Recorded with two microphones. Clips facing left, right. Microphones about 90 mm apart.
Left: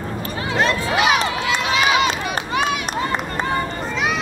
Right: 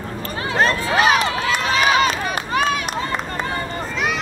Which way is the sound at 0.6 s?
40° right (ahead or behind).